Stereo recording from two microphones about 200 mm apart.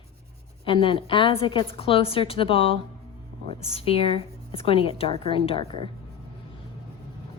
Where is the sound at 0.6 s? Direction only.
25° left (ahead or behind).